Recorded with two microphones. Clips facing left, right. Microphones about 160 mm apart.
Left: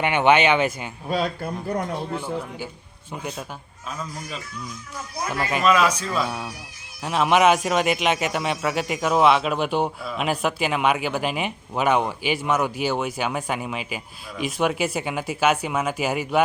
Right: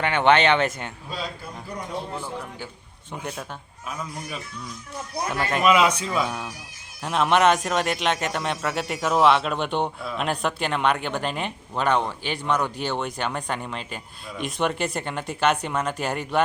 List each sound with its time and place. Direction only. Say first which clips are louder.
0.0 s speech: left 1 dB; 10° left (ahead or behind)
1.0 s speech: left 11 dB; 60° left (ahead or behind)
3.1 s speech: left 1 dB; 10° left (ahead or behind)
5.3 s a man's voice: even; centre (ahead or behind)
5.6 s a man's voice: even; 20° right (ahead or behind)
6.1 s a man's voice: even; 5° left (ahead or behind)